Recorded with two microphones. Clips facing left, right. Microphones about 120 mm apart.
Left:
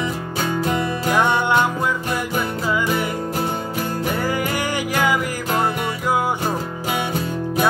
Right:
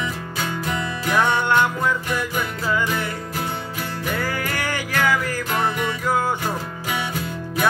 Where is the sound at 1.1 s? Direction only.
15° left (ahead or behind).